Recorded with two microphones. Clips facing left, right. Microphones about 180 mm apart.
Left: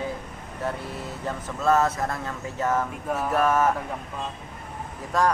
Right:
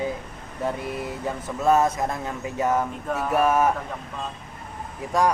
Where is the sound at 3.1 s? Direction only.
10° left (ahead or behind).